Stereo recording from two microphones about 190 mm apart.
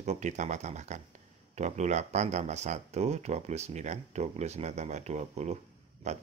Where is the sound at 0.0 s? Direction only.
35° right (ahead or behind).